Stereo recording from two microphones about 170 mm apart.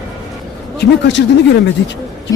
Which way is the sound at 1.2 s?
90° left.